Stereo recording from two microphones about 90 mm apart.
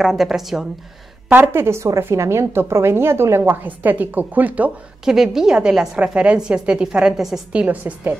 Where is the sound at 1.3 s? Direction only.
25° right (ahead or behind).